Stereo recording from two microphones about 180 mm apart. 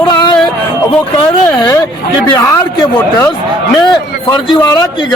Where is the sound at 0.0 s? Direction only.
25° left (ahead or behind).